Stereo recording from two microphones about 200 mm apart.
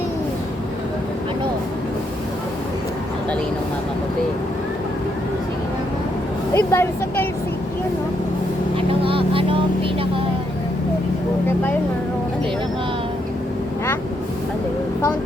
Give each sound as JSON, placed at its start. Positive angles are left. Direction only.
{"t": 6.5, "sound": "speech", "side_deg": 15}
{"t": 9.0, "sound": "vehicle", "side_deg": -25}